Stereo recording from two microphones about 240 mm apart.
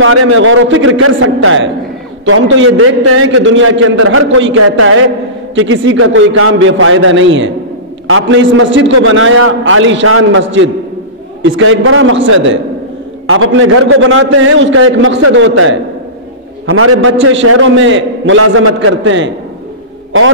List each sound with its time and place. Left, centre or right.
0.0 s a man's voice: right
4.4 s a man's voice: right